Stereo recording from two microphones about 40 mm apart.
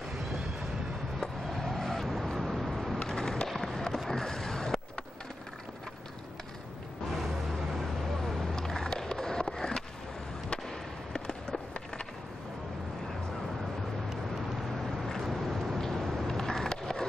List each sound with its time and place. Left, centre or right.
1.5 s vehicle: centre
3.1 s skateboard: centre
7.1 s vehicle: centre
8.2 s skateboard: centre
15.0 s vehicle: centre
15.8 s skateboard: centre